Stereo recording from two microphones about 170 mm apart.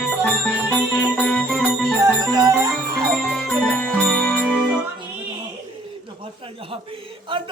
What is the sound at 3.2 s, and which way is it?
Music, 5° left (ahead or behind).